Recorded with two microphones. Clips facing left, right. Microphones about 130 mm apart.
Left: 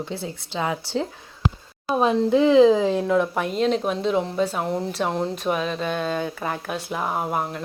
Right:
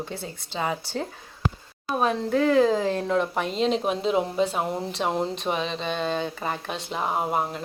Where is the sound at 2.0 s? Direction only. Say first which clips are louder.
Left 5 dB; 25° left (ahead or behind).